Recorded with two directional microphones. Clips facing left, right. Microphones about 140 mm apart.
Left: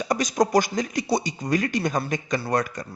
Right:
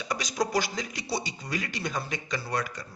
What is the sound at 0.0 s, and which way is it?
A man's voice, 45° left (ahead or behind).